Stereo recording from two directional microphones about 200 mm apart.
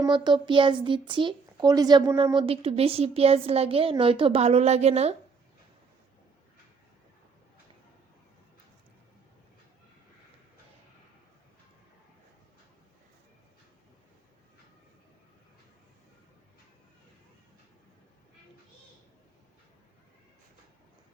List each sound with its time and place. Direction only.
0.0 s a child's voice: 20° right (ahead or behind)